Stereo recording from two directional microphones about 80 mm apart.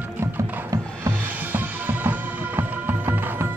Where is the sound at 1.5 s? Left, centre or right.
Right.